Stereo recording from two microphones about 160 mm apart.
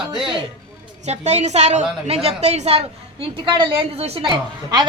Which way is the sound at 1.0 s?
45° right (ahead or behind).